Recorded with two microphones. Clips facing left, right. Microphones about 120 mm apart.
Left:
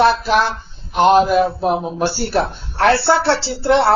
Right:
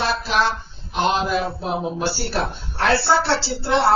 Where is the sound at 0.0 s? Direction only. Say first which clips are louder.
Left 7 dB; 60° left (ahead or behind).